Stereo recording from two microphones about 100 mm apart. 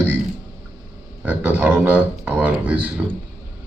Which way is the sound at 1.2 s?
15° right (ahead or behind).